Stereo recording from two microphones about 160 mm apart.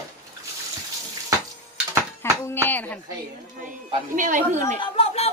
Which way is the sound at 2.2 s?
15° left (ahead or behind).